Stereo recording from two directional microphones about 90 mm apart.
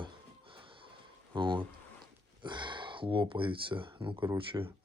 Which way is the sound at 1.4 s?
65° right (ahead or behind).